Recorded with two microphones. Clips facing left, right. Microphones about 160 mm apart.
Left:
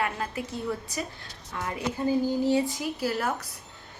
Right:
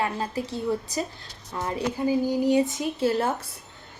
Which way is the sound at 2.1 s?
15° right (ahead or behind).